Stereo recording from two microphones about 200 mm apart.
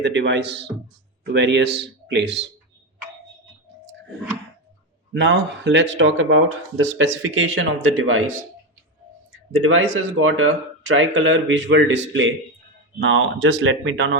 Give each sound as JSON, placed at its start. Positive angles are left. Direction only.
{"t": 0.0, "sound": "speech", "side_deg": -60}
{"t": 5.1, "sound": "speech", "side_deg": -60}
{"t": 9.6, "sound": "speech", "side_deg": -80}